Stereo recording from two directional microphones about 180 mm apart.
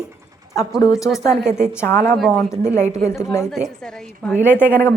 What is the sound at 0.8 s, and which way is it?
A woman's voice, 20° left (ahead or behind).